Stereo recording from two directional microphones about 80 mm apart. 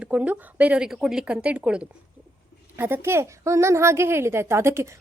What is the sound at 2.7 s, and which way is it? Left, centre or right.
A woman's voice, right.